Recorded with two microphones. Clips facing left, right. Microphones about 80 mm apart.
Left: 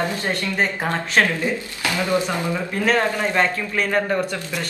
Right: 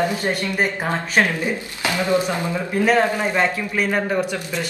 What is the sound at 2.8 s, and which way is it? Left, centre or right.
Speech, centre.